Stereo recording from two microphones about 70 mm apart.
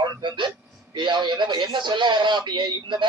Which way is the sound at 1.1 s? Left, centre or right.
Right.